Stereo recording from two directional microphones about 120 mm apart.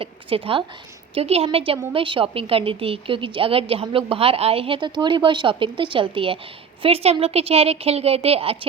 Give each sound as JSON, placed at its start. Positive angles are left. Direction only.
{"t": 0.0, "sound": "a woman's voice", "side_deg": -50}